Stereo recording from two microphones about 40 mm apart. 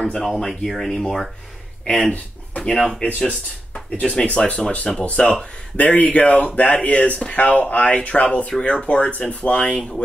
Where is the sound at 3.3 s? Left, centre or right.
Left.